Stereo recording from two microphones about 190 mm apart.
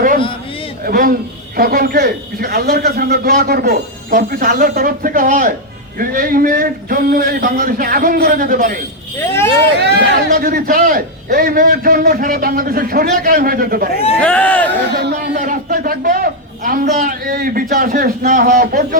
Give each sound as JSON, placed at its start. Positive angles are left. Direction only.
{"t": 0.9, "sound": "a man's voice", "side_deg": -50}
{"t": 9.7, "sound": "a man's voice", "side_deg": -60}
{"t": 14.2, "sound": "speech", "side_deg": 5}
{"t": 14.8, "sound": "a man's voice", "side_deg": -60}